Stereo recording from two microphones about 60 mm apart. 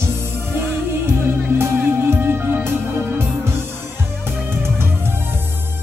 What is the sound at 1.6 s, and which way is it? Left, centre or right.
Music, right.